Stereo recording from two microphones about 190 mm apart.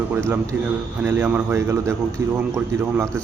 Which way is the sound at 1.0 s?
10° right (ahead or behind).